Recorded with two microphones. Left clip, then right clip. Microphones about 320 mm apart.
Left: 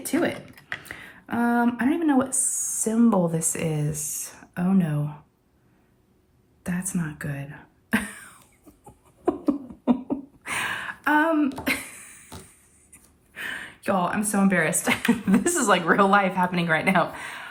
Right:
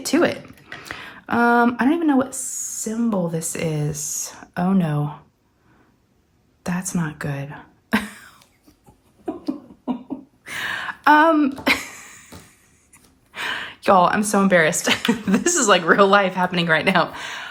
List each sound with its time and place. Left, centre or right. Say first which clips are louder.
0.0 s speech: right 6 dB; centre
6.7 s speech: right 5 dB; centre
10.4 s a sound: right 3 dB; centre
12.9 s gasp: right 8 dB; centre
15.0 s speech: right 3 dB; centre